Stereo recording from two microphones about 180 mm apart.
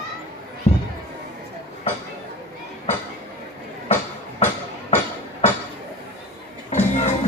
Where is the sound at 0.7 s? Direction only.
40° left (ahead or behind).